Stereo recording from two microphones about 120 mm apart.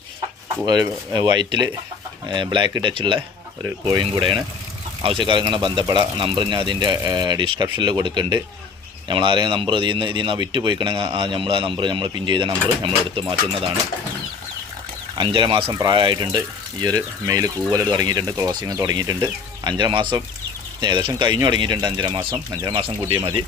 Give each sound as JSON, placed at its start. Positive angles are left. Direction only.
{"t": 0.6, "sound": "speech", "side_deg": -35}
{"t": 15.2, "sound": "speech", "side_deg": -40}